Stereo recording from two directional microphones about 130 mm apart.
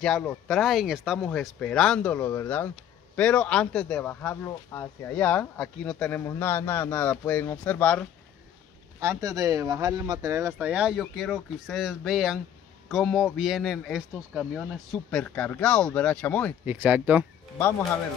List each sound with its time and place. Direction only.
0.0 s speech: 5° left (ahead or behind)
6.2 s speech: 20° left (ahead or behind)
9.0 s speech: 25° right (ahead or behind)
10.7 s speech: 10° right (ahead or behind); by 16.5 s 10° left (ahead or behind)
16.6 s speech: 15° right (ahead or behind)